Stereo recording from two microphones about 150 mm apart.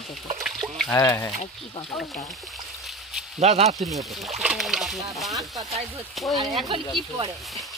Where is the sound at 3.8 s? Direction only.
Centre (ahead or behind).